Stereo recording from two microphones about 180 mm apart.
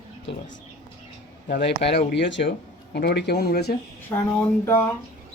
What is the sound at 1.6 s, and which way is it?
Speech, 70° left (ahead or behind).